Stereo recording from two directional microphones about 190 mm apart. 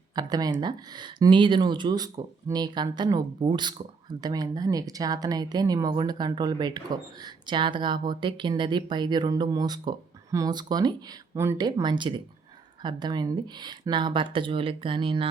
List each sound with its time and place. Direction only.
0.2 s speech: 20° right (ahead or behind)